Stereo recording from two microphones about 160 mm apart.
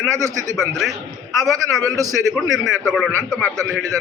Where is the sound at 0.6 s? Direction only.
Centre (ahead or behind).